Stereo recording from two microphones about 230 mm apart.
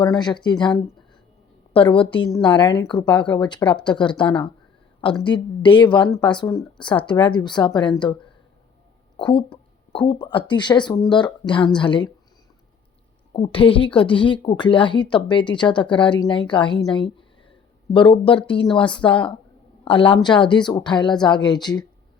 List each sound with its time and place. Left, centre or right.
0.0 s speech: centre
1.7 s speech: left
9.1 s speech: left
13.3 s speech: left